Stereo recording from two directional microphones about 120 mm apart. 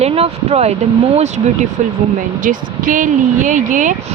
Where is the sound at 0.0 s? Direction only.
55° right (ahead or behind).